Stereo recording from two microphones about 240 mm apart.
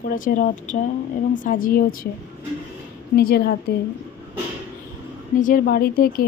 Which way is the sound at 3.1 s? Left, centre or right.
Left.